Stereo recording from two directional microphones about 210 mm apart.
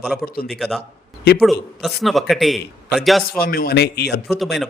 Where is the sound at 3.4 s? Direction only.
45° left (ahead or behind).